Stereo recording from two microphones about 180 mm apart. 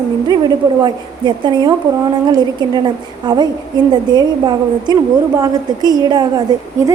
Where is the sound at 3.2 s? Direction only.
25° right (ahead or behind).